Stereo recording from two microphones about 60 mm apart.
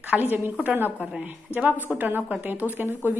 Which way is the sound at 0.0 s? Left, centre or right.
Right.